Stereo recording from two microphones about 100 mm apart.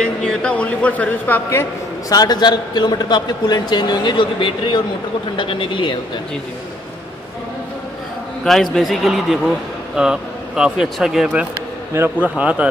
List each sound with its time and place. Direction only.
0.0 s a man's voice: 10° left (ahead or behind)
2.0 s a man's voice: 40° left (ahead or behind)
8.7 s speech: centre (ahead or behind)
11.9 s speech: 20° right (ahead or behind)